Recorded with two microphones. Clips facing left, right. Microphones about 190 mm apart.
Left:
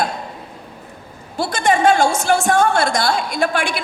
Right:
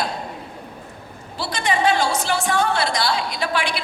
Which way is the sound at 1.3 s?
50° left (ahead or behind).